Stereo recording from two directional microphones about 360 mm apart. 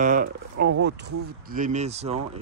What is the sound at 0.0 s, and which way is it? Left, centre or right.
Speech, right.